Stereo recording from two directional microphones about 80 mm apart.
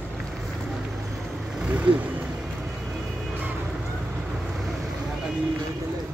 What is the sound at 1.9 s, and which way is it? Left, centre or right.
Speech, right.